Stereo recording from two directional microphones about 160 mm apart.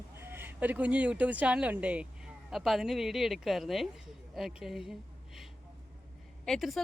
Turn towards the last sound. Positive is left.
turn(degrees=0)  # may be behind; listen again after turning